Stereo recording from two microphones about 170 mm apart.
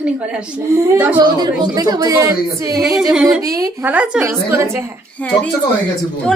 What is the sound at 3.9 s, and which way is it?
Speech, 5° right (ahead or behind).